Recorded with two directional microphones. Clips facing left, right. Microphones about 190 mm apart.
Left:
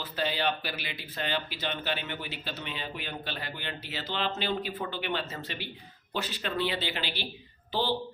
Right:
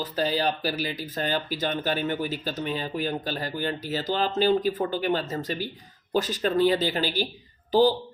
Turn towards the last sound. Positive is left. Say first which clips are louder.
# right 12 dB
turn(degrees=-40)  # may be behind; listen again after turning